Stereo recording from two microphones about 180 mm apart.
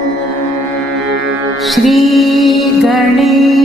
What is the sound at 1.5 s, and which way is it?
Music, centre (ahead or behind).